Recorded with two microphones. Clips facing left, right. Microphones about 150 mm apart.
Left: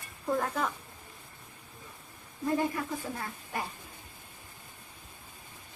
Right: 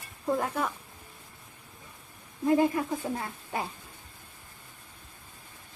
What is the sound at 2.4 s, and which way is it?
Speech, 20° right (ahead or behind).